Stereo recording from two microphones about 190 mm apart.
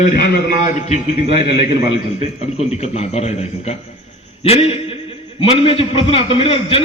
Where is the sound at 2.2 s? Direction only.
35° left (ahead or behind).